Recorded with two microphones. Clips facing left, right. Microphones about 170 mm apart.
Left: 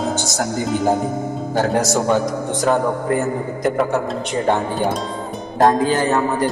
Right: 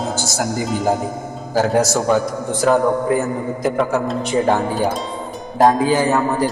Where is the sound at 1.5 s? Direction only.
Centre (ahead or behind).